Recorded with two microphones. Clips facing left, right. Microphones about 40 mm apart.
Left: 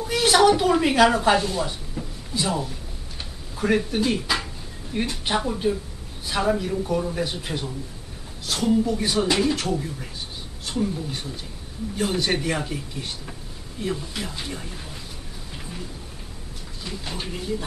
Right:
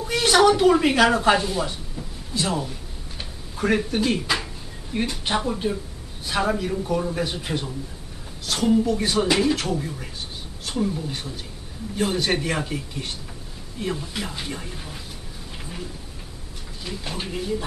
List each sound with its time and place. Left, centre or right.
0.0 s speech: centre
13.7 s speech: centre
16.8 s speech: centre